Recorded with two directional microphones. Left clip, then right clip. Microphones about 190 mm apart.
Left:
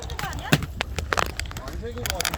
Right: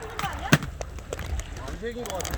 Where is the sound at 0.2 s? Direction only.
40° left (ahead or behind).